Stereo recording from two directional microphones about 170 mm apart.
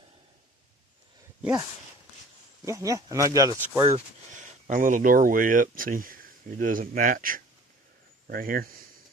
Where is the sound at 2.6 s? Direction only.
20° right (ahead or behind).